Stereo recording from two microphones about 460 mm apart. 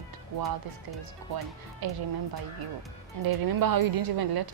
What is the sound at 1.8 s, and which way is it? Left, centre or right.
Speech, right.